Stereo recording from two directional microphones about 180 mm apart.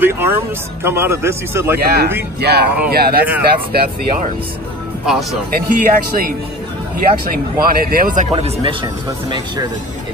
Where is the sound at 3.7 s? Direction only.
60° right (ahead or behind).